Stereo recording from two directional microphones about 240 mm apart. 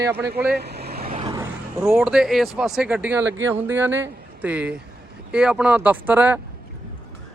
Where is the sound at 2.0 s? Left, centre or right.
Centre.